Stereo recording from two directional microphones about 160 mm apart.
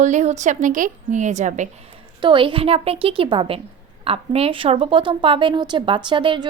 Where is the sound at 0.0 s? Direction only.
50° right (ahead or behind).